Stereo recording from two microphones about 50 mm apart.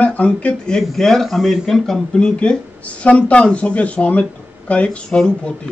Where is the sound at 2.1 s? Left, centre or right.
Centre.